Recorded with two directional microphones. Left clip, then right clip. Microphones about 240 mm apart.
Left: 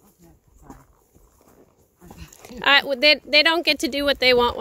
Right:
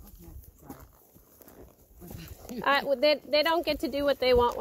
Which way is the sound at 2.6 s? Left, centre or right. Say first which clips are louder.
Left 8 dB; left.